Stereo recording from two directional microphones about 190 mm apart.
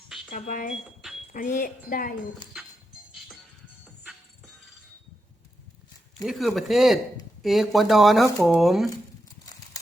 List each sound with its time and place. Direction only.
0.3 s speech: 45° left (ahead or behind)
6.2 s speech: centre (ahead or behind)